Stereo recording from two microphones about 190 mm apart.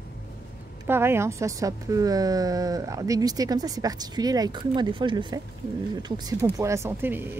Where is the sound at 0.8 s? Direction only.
10° right (ahead or behind).